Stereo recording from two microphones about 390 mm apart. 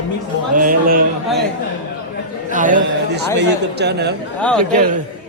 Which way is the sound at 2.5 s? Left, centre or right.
Centre.